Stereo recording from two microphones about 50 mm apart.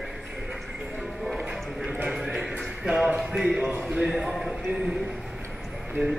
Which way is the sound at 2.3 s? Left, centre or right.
Centre.